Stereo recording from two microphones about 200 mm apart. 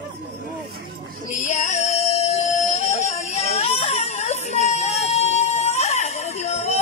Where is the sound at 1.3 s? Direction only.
40° left (ahead or behind).